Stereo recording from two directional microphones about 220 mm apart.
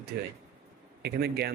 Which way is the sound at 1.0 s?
45° right (ahead or behind).